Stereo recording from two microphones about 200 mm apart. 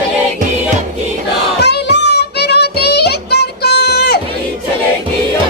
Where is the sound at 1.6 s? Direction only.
55° left (ahead or behind).